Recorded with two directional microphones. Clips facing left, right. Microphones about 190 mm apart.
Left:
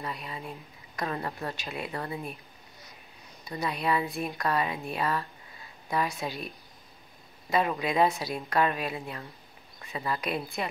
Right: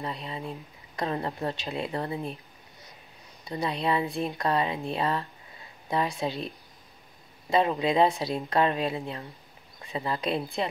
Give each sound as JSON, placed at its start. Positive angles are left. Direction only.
{"t": 0.0, "sound": "speech", "side_deg": -25}
{"t": 3.4, "sound": "speech", "side_deg": -25}